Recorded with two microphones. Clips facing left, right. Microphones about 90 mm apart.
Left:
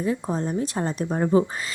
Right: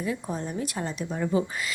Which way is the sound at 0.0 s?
35° left (ahead or behind).